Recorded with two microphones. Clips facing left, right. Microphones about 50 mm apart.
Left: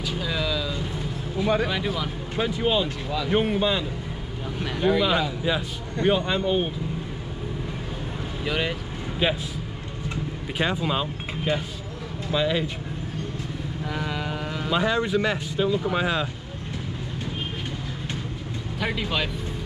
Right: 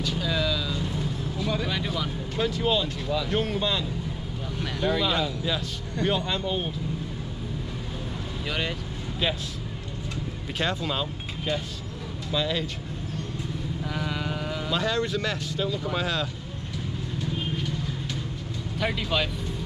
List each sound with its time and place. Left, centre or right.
0.0 s vehicle: centre
1.4 s speech: left
1.7 s speech: centre
2.3 s speech: centre
8.5 s speech: centre
10.6 s speech: centre
13.8 s speech: centre
18.8 s speech: centre